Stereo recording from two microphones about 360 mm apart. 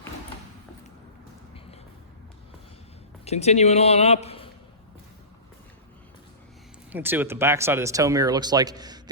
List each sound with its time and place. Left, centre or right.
3.2 s speech: centre
6.9 s speech: centre